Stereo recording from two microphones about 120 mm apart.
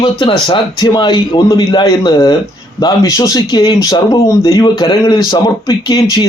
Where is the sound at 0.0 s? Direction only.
45° left (ahead or behind).